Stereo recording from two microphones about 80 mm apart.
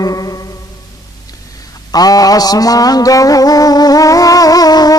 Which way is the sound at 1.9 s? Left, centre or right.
Left.